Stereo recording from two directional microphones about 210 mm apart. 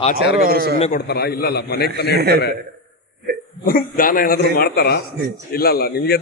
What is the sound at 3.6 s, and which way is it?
A man's voice, 45° left (ahead or behind).